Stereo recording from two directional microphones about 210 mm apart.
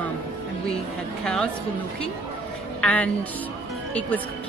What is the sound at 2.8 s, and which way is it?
Speech, 5° left (ahead or behind).